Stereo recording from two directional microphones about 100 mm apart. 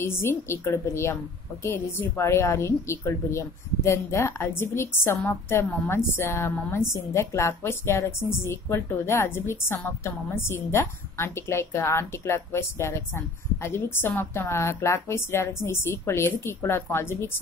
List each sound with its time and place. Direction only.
0.0 s a woman's voice: 25° left (ahead or behind)